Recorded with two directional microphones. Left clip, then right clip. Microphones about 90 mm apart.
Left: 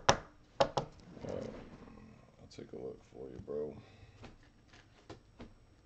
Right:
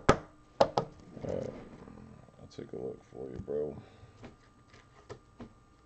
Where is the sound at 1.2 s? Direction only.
10° right (ahead or behind).